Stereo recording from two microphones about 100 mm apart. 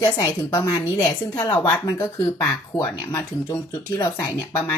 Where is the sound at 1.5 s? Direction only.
15° left (ahead or behind).